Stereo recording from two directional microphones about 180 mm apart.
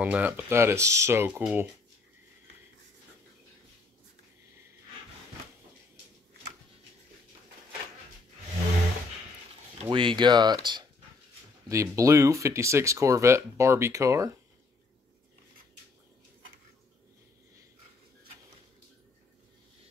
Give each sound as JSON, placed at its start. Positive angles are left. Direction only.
{"t": 0.0, "sound": "speech", "side_deg": -10}
{"t": 9.8, "sound": "speech", "side_deg": -30}